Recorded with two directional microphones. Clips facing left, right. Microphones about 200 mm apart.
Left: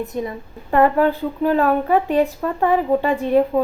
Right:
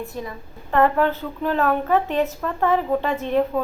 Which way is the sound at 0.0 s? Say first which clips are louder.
Left 6 dB; 20° left (ahead or behind).